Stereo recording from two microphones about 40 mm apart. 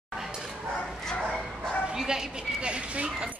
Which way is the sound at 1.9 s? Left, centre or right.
Centre.